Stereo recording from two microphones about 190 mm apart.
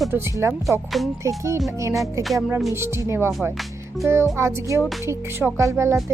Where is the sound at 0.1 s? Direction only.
15° right (ahead or behind).